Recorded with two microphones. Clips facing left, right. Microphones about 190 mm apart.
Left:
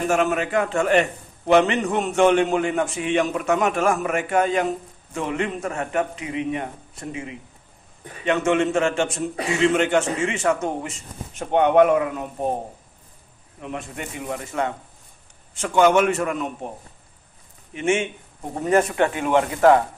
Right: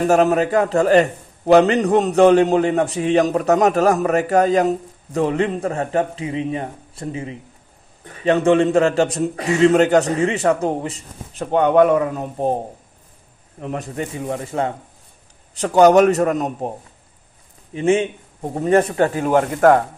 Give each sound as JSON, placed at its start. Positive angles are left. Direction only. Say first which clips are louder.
{"t": 0.0, "sound": "a man's voice", "louder": "right 6 dB", "side_deg": -35}
{"t": 13.6, "sound": "a man's voice", "louder": "right 6 dB", "side_deg": -40}
{"t": 17.7, "sound": "a man's voice", "louder": "right 5 dB", "side_deg": -35}